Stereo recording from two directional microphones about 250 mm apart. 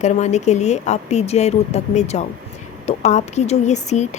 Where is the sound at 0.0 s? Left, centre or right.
Left.